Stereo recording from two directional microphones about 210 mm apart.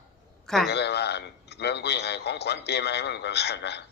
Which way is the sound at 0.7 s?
50° left (ahead or behind).